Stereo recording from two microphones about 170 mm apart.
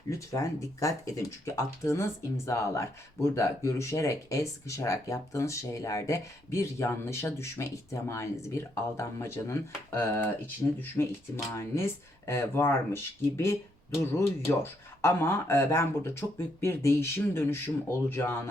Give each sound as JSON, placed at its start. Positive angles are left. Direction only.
{"t": 0.1, "sound": "speech", "side_deg": 15}